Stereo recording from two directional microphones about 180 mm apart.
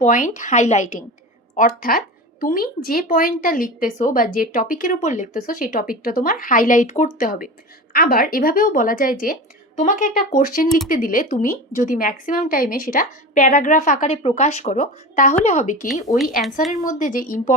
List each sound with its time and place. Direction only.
0.0 s speech: 45° left (ahead or behind)